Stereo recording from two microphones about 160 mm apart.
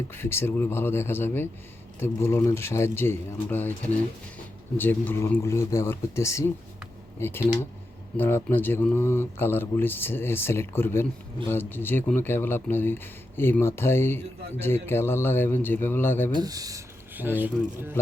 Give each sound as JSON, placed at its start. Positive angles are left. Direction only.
{"t": 0.1, "sound": "speech", "side_deg": 15}
{"t": 4.8, "sound": "speech", "side_deg": 10}
{"t": 16.3, "sound": "speech", "side_deg": -25}
{"t": 17.2, "sound": "speech", "side_deg": -10}